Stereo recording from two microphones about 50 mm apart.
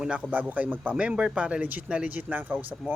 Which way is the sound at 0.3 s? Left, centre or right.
Right.